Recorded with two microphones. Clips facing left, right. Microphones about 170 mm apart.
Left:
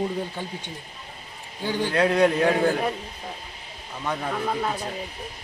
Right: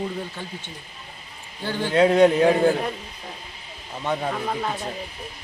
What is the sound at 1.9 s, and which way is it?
Speech, 25° right (ahead or behind).